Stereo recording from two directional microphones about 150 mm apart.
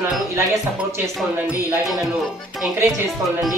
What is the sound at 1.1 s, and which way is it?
Speech, 10° right (ahead or behind).